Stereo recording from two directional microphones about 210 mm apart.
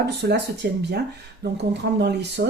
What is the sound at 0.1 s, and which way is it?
Speech, 55° right (ahead or behind).